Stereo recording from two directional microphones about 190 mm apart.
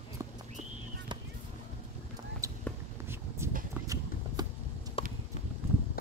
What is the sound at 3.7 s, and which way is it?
Clip-clop, 15° right (ahead or behind).